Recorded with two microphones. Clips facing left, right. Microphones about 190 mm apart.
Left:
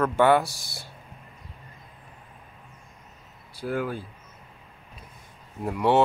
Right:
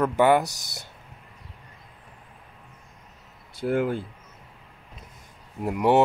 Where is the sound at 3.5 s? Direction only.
20° right (ahead or behind).